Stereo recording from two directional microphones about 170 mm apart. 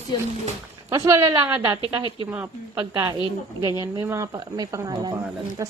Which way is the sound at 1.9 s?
30° right (ahead or behind).